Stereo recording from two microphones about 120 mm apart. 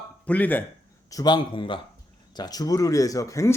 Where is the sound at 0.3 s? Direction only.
15° left (ahead or behind).